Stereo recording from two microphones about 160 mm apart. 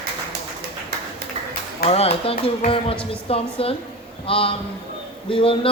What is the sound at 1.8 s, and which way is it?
Speech, 40° left (ahead or behind).